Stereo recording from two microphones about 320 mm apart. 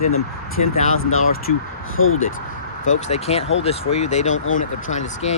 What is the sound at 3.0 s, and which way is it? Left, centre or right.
Speech, centre.